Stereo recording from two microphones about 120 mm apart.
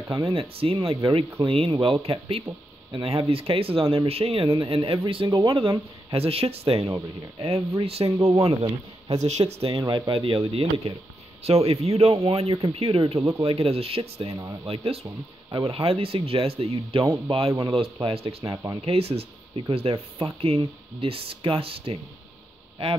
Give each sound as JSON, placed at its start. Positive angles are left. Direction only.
{"t": 0.1, "sound": "speech", "side_deg": -45}
{"t": 8.2, "sound": "speech", "side_deg": -30}
{"t": 9.2, "sound": "speech", "side_deg": -65}
{"t": 9.7, "sound": "speech", "side_deg": -40}
{"t": 18.4, "sound": "speech", "side_deg": -30}
{"t": 18.9, "sound": "speech", "side_deg": -55}